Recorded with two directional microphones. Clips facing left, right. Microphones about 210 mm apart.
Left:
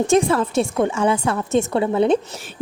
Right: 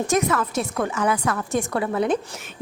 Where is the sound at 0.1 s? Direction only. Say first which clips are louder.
Left 4 dB; 30° left (ahead or behind).